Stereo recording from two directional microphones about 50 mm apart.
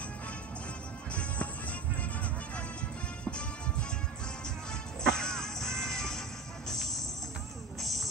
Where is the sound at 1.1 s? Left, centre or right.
Left.